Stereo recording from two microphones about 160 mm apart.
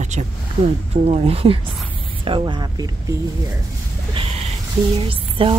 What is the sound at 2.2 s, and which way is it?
Speech, 35° right (ahead or behind).